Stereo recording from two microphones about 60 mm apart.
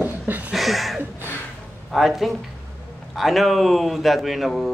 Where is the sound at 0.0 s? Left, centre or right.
Right.